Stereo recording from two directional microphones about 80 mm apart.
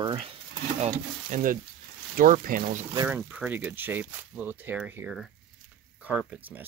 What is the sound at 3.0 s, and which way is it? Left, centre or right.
Speech, right.